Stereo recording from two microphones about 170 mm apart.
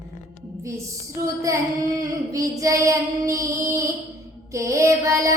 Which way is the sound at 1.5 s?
20° right (ahead or behind).